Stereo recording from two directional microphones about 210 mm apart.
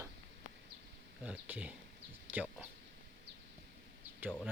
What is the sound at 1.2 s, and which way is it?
Speech, 5° right (ahead or behind).